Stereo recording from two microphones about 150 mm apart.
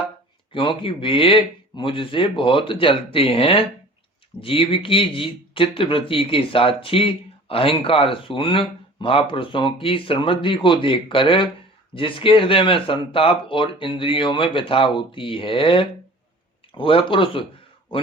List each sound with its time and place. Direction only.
0.5 s speech: 35° left (ahead or behind)